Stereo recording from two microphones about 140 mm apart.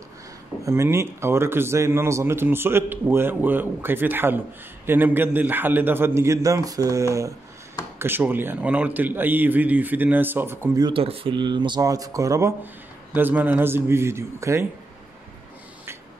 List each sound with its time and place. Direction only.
0.7 s a man's voice: 20° right (ahead or behind)
10.8 s a man's voice: 40° right (ahead or behind); by 14.7 s 20° right (ahead or behind)